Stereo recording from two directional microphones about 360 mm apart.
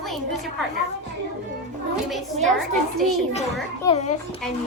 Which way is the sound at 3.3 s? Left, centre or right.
Centre.